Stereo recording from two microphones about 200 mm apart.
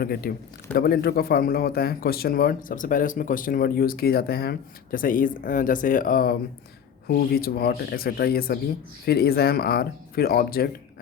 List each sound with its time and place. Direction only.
0.0 s a man's voice: 50° left (ahead or behind)